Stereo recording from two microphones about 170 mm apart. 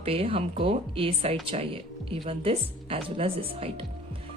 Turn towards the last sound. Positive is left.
turn(degrees=-35)  # may be behind; listen again after turning